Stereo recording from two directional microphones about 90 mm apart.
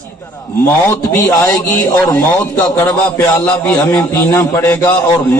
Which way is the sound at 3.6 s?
10° left (ahead or behind).